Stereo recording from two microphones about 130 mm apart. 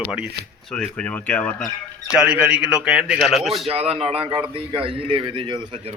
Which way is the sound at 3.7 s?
50° right (ahead or behind).